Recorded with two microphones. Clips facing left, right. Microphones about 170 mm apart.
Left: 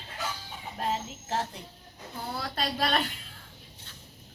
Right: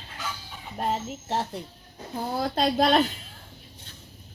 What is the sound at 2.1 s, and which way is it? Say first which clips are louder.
Speech: right 8 dB; 45° right (ahead or behind).